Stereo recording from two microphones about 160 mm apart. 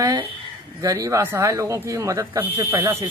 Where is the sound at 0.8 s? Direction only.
20° right (ahead or behind).